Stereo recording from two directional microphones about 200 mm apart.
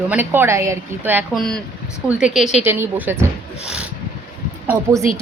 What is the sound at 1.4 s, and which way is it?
Speech, 5° left (ahead or behind).